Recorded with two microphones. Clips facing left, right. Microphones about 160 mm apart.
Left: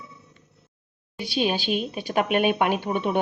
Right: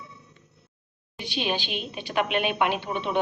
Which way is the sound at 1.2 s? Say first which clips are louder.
Left 4 dB; 40° left (ahead or behind).